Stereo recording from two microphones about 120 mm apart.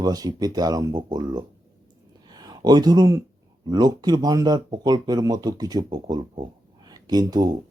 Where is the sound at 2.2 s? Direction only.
35° right (ahead or behind).